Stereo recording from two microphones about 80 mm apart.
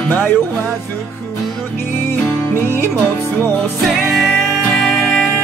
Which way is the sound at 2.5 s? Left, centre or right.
Left.